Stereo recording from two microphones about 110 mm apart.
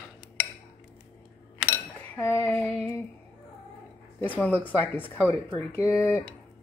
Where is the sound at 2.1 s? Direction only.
20° left (ahead or behind).